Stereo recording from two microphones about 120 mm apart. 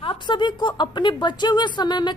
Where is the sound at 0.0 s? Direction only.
45° left (ahead or behind).